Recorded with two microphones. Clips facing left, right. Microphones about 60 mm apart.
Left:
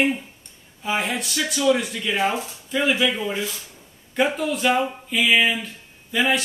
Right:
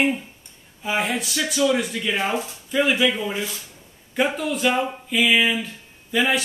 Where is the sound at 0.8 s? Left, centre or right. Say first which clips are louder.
Right 1 dB; centre.